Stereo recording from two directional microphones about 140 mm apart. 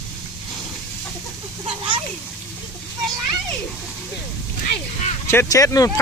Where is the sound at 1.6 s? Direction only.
40° right (ahead or behind).